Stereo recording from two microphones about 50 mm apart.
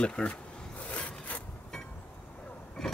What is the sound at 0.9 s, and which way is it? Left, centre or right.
Wood, left.